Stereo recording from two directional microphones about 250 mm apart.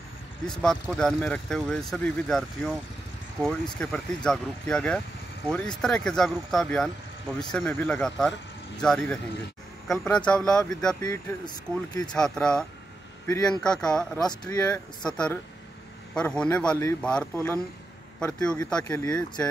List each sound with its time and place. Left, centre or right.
0.5 s speech: centre
3.7 s speech: centre
11.0 s speech: centre
12.1 s speech: centre